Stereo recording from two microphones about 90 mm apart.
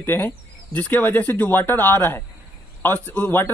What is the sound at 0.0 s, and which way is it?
Speech, 20° left (ahead or behind).